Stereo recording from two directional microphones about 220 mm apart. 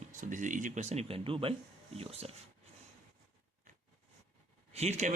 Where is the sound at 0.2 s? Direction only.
35° right (ahead or behind).